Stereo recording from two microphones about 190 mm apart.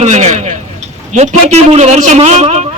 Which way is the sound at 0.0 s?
35° right (ahead or behind).